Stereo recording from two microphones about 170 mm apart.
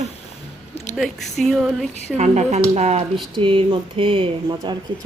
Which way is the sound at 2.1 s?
40° right (ahead or behind).